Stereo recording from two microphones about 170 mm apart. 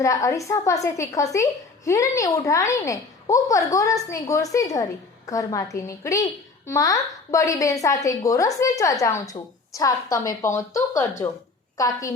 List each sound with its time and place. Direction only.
0.0 s a woman's voice: 20° left (ahead or behind)